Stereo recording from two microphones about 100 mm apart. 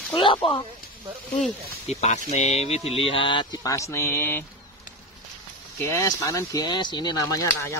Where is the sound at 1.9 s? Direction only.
90° left; by 3.4 s 55° left (ahead or behind).